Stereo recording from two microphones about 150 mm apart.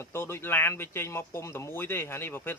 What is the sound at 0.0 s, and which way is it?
Speech, 15° left (ahead or behind).